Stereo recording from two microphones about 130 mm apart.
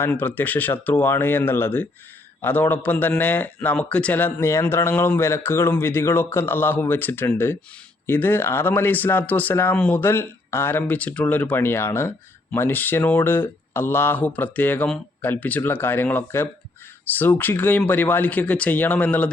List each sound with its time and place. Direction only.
0.0 s speech: 15° left (ahead or behind)